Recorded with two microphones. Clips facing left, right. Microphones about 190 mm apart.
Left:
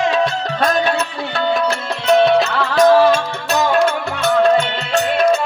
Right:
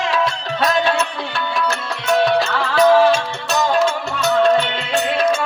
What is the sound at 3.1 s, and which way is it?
Music, 50° left (ahead or behind).